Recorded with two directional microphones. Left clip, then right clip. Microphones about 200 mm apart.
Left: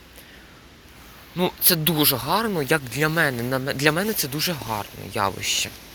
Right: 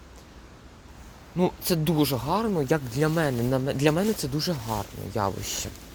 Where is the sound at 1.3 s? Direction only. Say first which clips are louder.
Left 3 dB; 15° right (ahead or behind).